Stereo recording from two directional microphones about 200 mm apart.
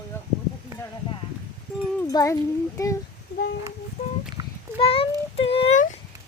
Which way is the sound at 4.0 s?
35° left (ahead or behind).